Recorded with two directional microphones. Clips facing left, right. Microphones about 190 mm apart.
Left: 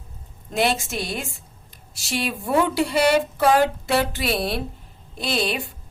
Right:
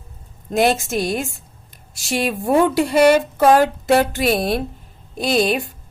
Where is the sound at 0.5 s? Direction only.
45° right (ahead or behind).